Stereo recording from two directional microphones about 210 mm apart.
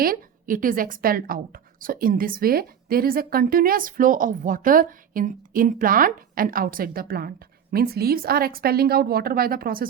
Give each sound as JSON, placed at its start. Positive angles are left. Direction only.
{"t": 0.0, "sound": "a woman's voice", "side_deg": -40}